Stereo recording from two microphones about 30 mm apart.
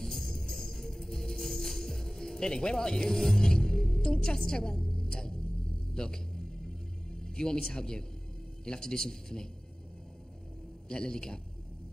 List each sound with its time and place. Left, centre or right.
0.0 s music: centre
8.6 s speech: left
10.9 s speech: left